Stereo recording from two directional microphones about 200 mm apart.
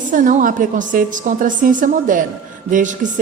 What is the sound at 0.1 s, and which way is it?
A woman's voice, 40° right (ahead or behind).